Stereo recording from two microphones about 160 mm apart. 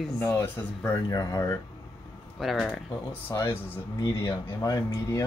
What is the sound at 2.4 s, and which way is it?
Speech, centre (ahead or behind).